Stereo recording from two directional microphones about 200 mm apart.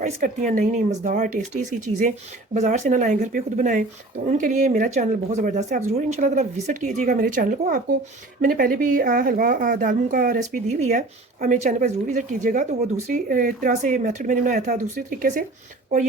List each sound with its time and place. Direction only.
0.0 s speech: 40° right (ahead or behind)